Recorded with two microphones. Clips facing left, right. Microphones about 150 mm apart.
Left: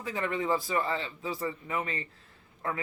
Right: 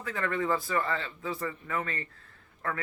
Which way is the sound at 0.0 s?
20° left (ahead or behind).